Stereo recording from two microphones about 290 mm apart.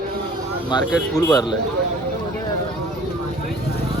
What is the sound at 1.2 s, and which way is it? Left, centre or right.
Speech, centre.